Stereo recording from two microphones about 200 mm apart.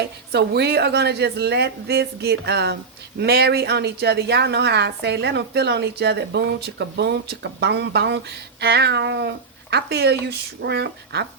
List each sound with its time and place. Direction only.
0.3 s a woman's voice: 55° right (ahead or behind)